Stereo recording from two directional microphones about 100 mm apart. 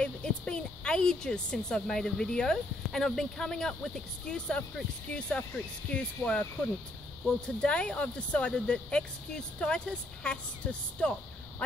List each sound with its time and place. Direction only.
0.0 s a woman's voice: 10° left (ahead or behind)